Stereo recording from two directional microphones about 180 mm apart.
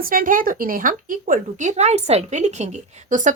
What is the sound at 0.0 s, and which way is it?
Speech, 50° right (ahead or behind).